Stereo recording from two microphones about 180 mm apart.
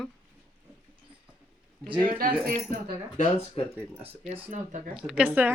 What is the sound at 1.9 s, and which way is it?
Speech, 50° right (ahead or behind).